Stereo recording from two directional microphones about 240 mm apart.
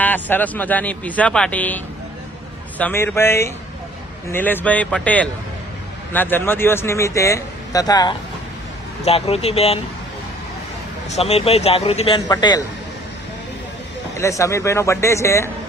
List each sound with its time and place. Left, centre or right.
0.0 s a man's voice: centre; by 9.8 s left
11.1 s a man's voice: left
14.2 s speech: centre